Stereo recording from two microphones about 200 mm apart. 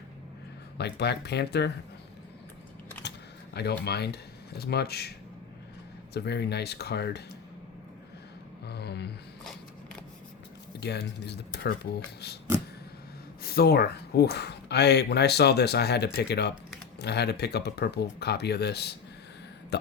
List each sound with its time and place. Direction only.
0.8 s speech: 55° left (ahead or behind)
3.5 s speech: 55° left (ahead or behind)
6.1 s speech: 55° left (ahead or behind)
8.6 s a sound: 55° left (ahead or behind)
9.4 s a sound: centre (ahead or behind)
10.8 s speech: 55° left (ahead or behind)
13.4 s speech: 50° left (ahead or behind)